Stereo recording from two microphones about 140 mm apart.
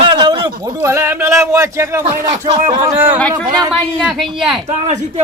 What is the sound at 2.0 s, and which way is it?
Speech, 45° right (ahead or behind).